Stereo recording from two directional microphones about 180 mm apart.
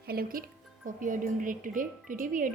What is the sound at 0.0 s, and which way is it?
Speech, 55° right (ahead or behind).